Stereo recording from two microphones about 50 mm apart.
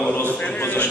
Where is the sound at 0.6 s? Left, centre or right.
Left.